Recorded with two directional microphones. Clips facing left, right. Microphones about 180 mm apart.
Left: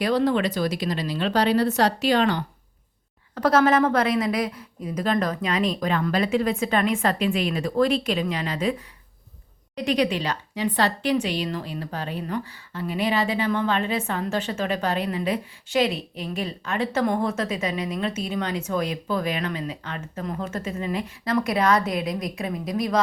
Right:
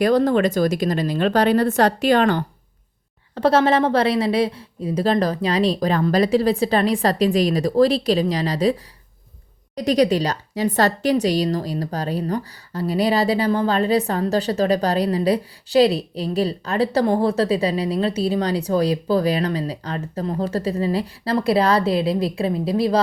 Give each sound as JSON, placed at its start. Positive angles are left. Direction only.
{"t": 0.0, "sound": "speech", "side_deg": -45}
{"t": 3.3, "sound": "a woman's voice", "side_deg": -30}
{"t": 9.7, "sound": "a woman's voice", "side_deg": -40}